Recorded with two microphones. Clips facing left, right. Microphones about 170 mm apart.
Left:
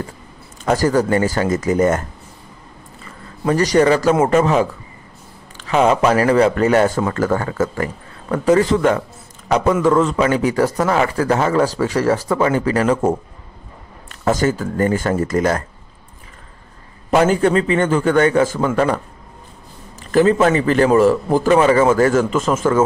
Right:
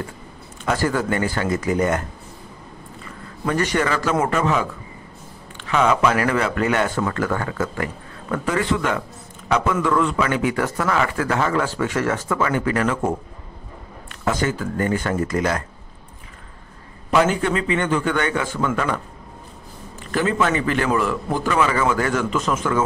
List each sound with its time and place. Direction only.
0.7 s a man's voice: 40° left (ahead or behind)
3.4 s a man's voice: 35° left (ahead or behind)
14.2 s a man's voice: 40° left (ahead or behind)
17.1 s a man's voice: 40° left (ahead or behind)
20.1 s a man's voice: 35° left (ahead or behind)